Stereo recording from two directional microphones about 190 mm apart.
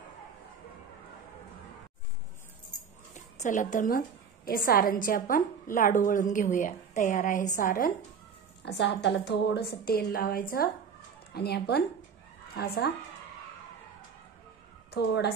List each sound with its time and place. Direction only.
3.2 s a woman's voice: 40° left (ahead or behind)
8.6 s a woman's voice: 65° left (ahead or behind)
14.9 s a woman's voice: 60° left (ahead or behind)